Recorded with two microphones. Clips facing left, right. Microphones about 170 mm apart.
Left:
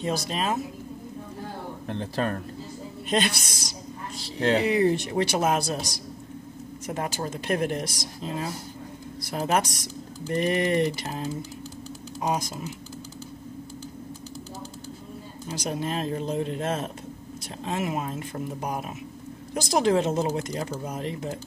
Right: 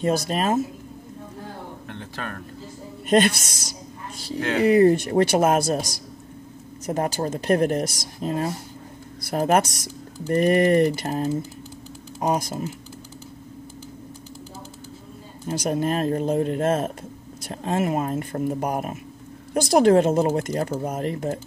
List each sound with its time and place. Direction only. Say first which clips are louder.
0.0 s speech: right 5 dB; 50° right (ahead or behind)
1.9 s speech: left 9 dB; 35° left (ahead or behind)
3.1 s speech: right 7 dB; 50° right (ahead or behind)
6.9 s speech: right 6 dB; 40° right (ahead or behind)
15.4 s speech: right 7 dB; 50° right (ahead or behind)